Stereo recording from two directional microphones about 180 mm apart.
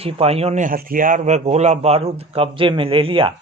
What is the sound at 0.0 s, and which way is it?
Speech, 35° right (ahead or behind).